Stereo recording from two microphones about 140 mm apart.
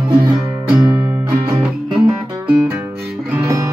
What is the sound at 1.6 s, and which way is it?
Music, 5° right (ahead or behind).